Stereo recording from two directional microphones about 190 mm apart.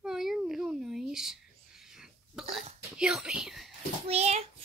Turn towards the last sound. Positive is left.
turn(degrees=-35)  # may be behind; listen again after turning